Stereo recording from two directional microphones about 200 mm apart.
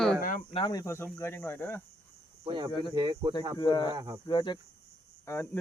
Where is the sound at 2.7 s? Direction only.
25° left (ahead or behind).